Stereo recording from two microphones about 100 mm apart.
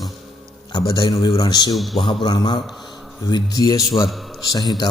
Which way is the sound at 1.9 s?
50° left (ahead or behind).